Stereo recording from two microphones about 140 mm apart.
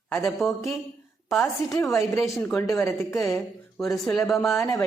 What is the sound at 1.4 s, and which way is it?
A woman's voice, 20° left (ahead or behind).